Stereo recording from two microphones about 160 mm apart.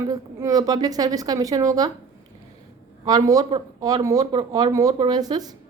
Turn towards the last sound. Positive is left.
turn(degrees=-25)  # may be behind; listen again after turning